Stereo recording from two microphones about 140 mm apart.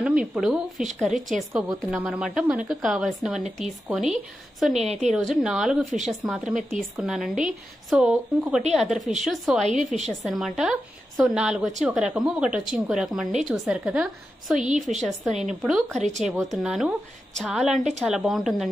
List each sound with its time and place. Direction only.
0.0 s speech: 5° right (ahead or behind)
4.7 s a woman's voice: 50° right (ahead or behind)
5.1 s a woman's voice: centre (ahead or behind)
16.0 s speech: 60° right (ahead or behind)
16.6 s speech: centre (ahead or behind)